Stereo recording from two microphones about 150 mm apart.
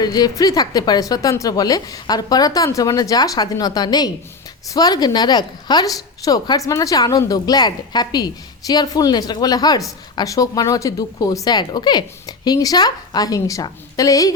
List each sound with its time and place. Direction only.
0.0 s a woman's voice: 25° left (ahead or behind)